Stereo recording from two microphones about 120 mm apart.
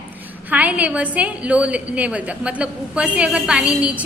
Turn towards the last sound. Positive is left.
turn(degrees=-10)  # may be behind; listen again after turning